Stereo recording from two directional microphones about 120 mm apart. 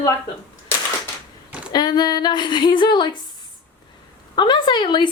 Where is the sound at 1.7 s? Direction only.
35° left (ahead or behind).